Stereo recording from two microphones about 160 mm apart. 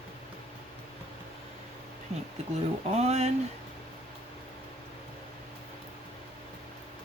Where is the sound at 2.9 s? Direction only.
45° right (ahead or behind).